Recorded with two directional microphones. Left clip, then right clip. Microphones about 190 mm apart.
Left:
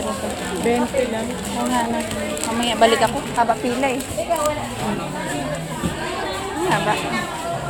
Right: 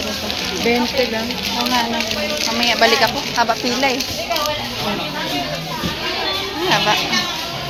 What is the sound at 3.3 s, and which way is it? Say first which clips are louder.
Speech: right 1 dB; centre (ahead or behind).